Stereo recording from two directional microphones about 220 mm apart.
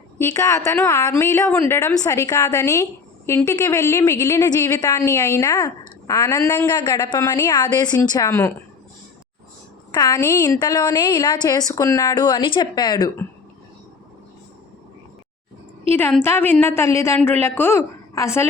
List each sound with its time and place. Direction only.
0.2 s a woman's voice: 10° left (ahead or behind)
9.9 s a woman's voice: 15° left (ahead or behind)
16.2 s a woman's voice: 10° left (ahead or behind)